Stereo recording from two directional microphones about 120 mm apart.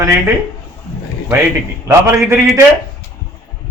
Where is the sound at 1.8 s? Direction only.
25° right (ahead or behind).